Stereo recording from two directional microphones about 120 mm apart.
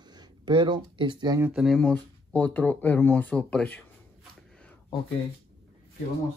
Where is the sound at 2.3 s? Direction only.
10° left (ahead or behind).